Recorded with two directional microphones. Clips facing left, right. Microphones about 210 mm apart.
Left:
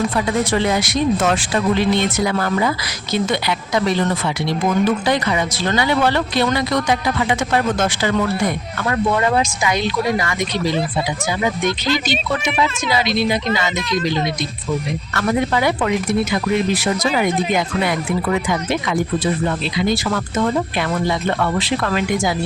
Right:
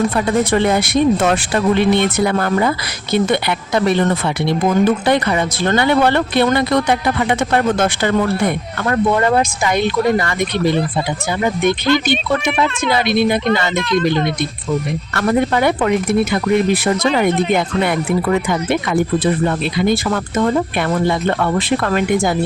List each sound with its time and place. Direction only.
0.3 s speech: 50° right (ahead or behind)
12.1 s speech: centre (ahead or behind)
12.9 s speech: 55° right (ahead or behind)
15.3 s speech: 50° right (ahead or behind)